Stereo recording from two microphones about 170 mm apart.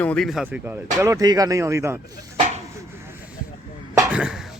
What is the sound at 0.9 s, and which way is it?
Speech, 20° right (ahead or behind).